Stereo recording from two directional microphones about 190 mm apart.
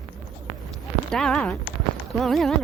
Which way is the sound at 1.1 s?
5° left (ahead or behind).